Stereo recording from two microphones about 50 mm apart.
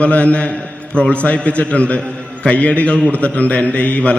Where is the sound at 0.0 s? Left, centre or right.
Left.